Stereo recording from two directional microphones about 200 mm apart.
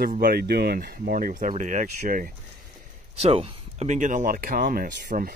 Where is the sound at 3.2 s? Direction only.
30° right (ahead or behind).